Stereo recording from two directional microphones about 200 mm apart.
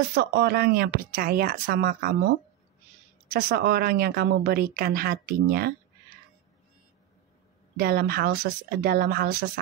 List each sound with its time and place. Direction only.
0.1 s speech: 55° right (ahead or behind)
3.3 s speech: 50° right (ahead or behind)
7.7 s speech: 50° right (ahead or behind)